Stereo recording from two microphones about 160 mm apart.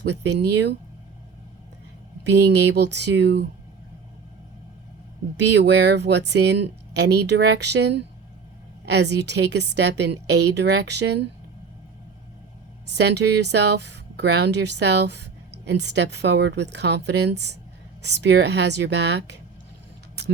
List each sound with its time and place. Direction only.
0.1 s speech: 90° right
2.3 s speech: 90° right
5.4 s speech: 90° right
12.9 s speech: 90° right